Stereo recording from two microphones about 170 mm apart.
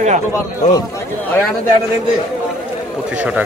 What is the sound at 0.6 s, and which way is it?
Speech, 45° left (ahead or behind).